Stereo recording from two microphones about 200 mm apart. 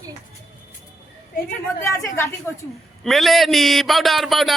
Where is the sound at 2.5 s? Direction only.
10° left (ahead or behind).